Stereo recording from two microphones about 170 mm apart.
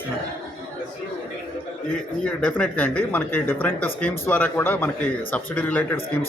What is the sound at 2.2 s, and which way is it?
Speech, 10° left (ahead or behind).